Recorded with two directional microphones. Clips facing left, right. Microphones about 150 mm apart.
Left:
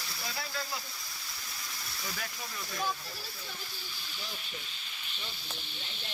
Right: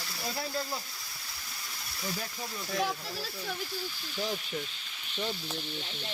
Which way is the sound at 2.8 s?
75° right (ahead or behind).